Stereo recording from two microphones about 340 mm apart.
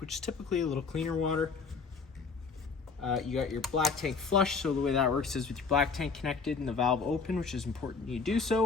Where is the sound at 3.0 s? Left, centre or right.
Centre.